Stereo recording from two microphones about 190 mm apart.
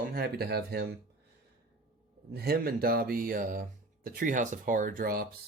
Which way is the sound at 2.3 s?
55° right (ahead or behind).